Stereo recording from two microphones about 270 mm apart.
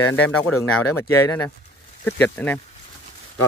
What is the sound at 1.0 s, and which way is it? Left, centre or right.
Speech, centre.